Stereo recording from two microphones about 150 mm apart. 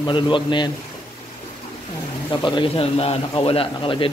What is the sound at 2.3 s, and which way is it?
A man's voice, 35° left (ahead or behind).